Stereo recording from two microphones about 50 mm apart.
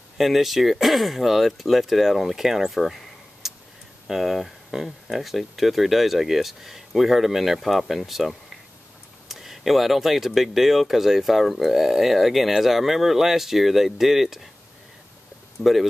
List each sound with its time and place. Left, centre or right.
0.2 s speech: centre
15.6 s speech: left